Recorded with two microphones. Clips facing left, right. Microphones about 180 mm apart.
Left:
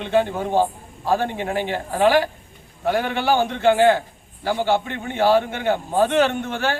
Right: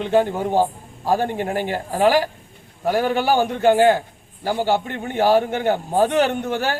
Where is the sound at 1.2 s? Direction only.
45° right (ahead or behind).